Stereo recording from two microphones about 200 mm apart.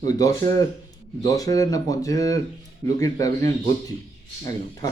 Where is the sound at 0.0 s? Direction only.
15° left (ahead or behind).